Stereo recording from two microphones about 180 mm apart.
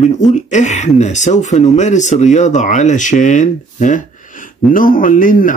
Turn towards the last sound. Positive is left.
turn(degrees=50)  # may be behind; listen again after turning